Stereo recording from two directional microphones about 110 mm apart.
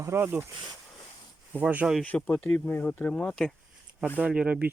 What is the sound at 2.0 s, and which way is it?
Speech, 15° left (ahead or behind).